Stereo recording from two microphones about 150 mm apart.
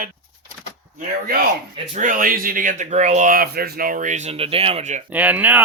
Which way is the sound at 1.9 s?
65° right (ahead or behind).